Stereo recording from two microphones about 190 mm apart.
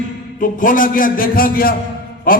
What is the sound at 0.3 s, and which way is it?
A man's voice, 45° left (ahead or behind).